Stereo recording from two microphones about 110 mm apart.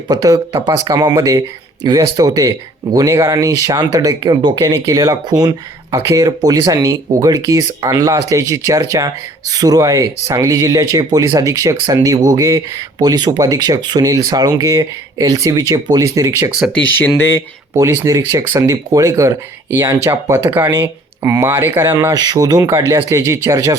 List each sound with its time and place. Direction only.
0.1 s speech: 35° right (ahead or behind)
16.5 s speech: 5° right (ahead or behind)
17.2 s speech: 20° left (ahead or behind)
17.7 s speech: 25° right (ahead or behind)
22.1 s speech: 35° right (ahead or behind)